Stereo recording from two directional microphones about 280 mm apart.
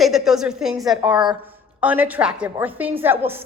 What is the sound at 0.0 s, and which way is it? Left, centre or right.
Speech, centre.